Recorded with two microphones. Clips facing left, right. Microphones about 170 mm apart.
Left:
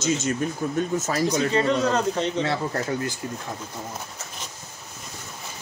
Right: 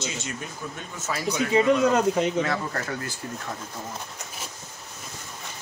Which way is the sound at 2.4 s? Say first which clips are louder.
Left 3 dB; 25° left (ahead or behind).